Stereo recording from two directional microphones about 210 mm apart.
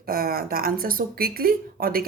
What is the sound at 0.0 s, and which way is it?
Speech, 45° right (ahead or behind).